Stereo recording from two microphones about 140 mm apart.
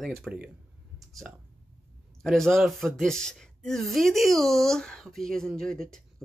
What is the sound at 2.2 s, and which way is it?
Speech, centre (ahead or behind).